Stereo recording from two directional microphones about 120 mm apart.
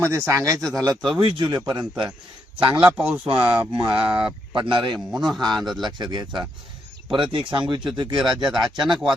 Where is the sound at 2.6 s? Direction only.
50° right (ahead or behind).